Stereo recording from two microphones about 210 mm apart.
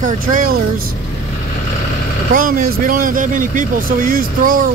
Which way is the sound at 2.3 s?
40° right (ahead or behind).